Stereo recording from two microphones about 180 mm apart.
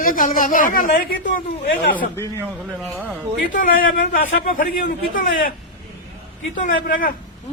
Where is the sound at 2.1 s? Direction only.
15° left (ahead or behind).